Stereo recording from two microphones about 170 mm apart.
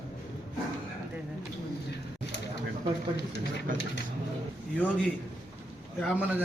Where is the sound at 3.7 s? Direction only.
50° right (ahead or behind).